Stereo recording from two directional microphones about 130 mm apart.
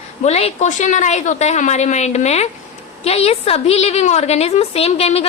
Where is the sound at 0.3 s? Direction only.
55° left (ahead or behind).